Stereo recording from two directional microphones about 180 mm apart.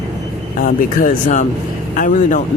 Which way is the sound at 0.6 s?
50° left (ahead or behind).